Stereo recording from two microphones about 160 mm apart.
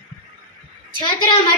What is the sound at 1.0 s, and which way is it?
Speech, 30° left (ahead or behind).